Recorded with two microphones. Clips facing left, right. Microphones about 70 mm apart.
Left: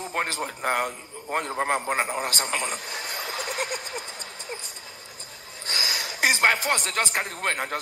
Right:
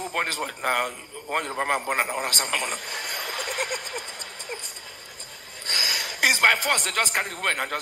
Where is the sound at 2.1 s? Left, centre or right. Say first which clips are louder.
Even; right.